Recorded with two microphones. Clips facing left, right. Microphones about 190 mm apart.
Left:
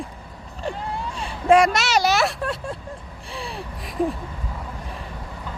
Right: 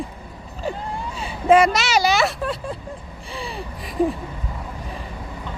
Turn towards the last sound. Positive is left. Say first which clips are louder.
# right 3 dB
turn(degrees=0)  # may be behind; listen again after turning